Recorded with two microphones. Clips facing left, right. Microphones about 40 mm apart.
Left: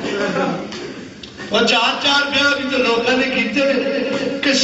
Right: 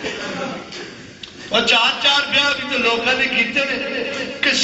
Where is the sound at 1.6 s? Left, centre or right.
Right.